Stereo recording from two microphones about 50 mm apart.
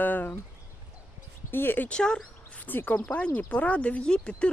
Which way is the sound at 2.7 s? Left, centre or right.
Left.